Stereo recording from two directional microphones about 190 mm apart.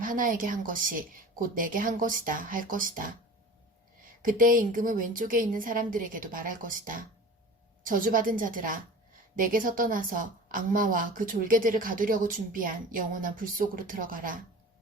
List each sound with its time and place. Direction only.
0.0 s a woman's voice: 45° right (ahead or behind)
4.2 s a woman's voice: 45° right (ahead or behind)